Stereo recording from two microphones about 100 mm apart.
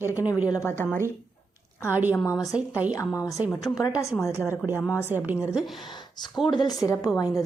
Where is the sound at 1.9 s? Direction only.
15° right (ahead or behind).